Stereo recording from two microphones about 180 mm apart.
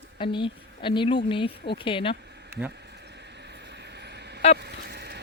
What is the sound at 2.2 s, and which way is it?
Insect, 70° right (ahead or behind).